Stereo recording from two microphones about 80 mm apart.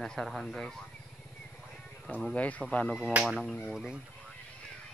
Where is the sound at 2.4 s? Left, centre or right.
Centre.